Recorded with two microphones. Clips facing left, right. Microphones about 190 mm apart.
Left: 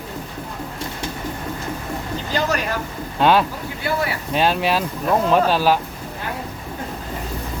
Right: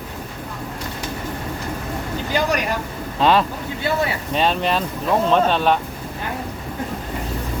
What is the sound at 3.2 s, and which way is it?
Speech, centre (ahead or behind).